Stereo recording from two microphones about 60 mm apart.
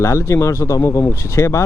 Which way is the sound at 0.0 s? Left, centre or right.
Left.